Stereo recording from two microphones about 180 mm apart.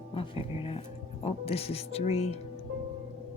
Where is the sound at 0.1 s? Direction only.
30° left (ahead or behind).